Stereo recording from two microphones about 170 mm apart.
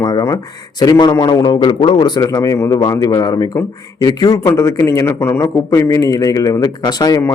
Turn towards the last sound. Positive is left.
turn(degrees=20)  # may be behind; listen again after turning